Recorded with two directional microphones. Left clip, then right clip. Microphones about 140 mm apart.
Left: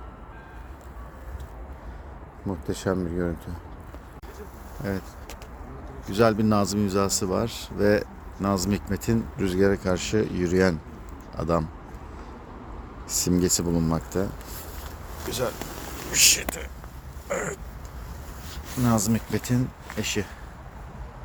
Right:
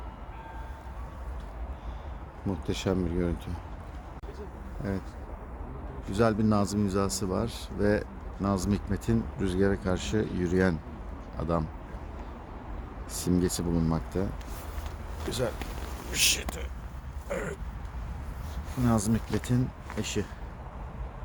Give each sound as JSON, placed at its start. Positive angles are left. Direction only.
{"t": 2.5, "sound": "speech", "side_deg": 0}
{"t": 4.8, "sound": "speech", "side_deg": 20}
{"t": 6.1, "sound": "speech", "side_deg": 25}
{"t": 13.1, "sound": "speech", "side_deg": 20}
{"t": 15.3, "sound": "speech", "side_deg": -15}
{"t": 16.1, "sound": "speech", "side_deg": 5}
{"t": 17.2, "sound": "a sound", "side_deg": 10}
{"t": 18.9, "sound": "speech", "side_deg": 15}